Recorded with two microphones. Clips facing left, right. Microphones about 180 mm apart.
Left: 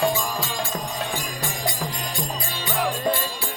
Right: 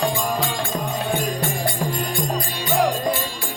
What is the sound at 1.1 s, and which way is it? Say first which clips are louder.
Music: right 7 dB; 60° right (ahead or behind).